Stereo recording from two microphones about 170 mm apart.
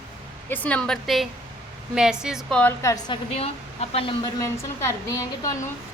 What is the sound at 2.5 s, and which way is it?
A woman's voice, 15° left (ahead or behind).